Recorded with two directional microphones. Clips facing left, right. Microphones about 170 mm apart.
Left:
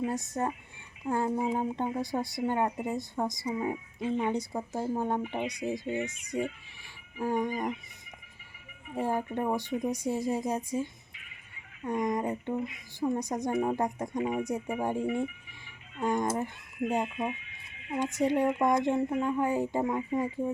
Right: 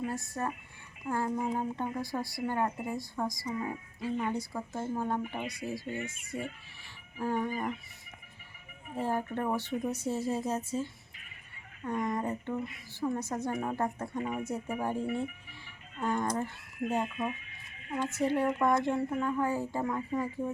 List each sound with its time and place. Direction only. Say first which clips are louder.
0.1 s speech: left 4 dB; 20° left (ahead or behind)
9.0 s speech: left 2 dB; 15° left (ahead or behind)
11.1 s music: left 1 dB; 45° right (ahead or behind)
11.8 s speech: left 3 dB; 15° left (ahead or behind)
17.0 s speech: left 1 dB; centre (ahead or behind)
17.3 s a sound: left 1 dB; 45° right (ahead or behind)
17.9 s speech: left 2 dB; 15° left (ahead or behind)